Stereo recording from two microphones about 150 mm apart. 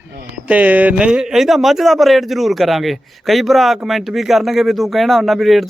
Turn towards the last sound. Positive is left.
turn(degrees=0)  # may be behind; listen again after turning